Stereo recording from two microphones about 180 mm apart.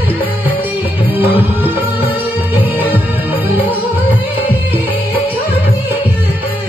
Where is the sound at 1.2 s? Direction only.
30° left (ahead or behind).